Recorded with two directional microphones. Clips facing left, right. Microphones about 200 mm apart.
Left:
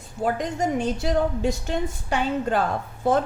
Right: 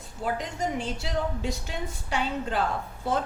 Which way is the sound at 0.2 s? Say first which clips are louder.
Left 5 dB; 50° left (ahead or behind).